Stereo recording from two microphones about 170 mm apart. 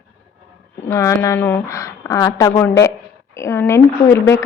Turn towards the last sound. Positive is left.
turn(degrees=15)  # may be behind; listen again after turning